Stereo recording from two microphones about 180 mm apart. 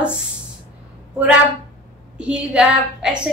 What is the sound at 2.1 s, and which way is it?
A woman's voice, 5° right (ahead or behind).